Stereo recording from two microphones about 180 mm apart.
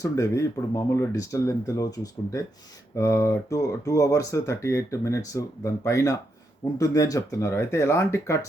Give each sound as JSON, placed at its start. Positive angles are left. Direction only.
{"t": 0.0, "sound": "speech", "side_deg": 20}